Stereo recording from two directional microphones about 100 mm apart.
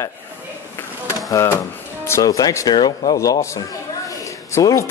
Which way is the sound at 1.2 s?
35° left (ahead or behind).